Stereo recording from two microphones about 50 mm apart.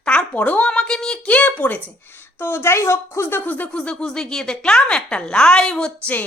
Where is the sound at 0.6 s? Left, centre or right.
Centre.